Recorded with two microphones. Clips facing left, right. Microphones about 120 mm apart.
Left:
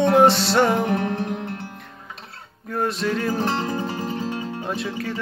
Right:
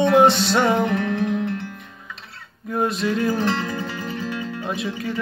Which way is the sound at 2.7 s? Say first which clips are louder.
Right 2 dB; centre (ahead or behind).